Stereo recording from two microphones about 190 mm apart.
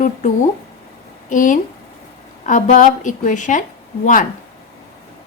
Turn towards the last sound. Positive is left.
turn(degrees=45)  # may be behind; listen again after turning